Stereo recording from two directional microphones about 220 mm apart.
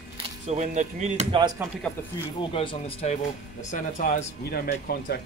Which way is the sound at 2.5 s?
25° left (ahead or behind).